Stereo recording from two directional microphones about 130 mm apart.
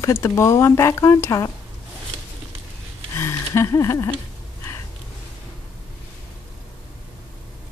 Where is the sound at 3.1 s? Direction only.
20° left (ahead or behind).